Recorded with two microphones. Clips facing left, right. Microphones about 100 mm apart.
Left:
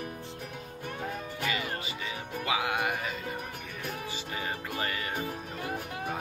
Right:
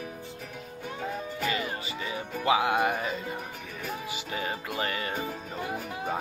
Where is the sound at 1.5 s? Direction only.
35° right (ahead or behind).